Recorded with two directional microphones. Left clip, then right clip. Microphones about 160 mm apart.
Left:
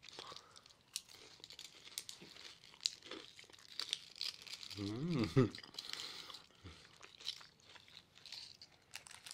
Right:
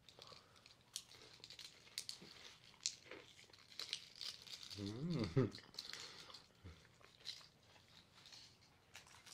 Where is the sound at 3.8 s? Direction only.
25° left (ahead or behind).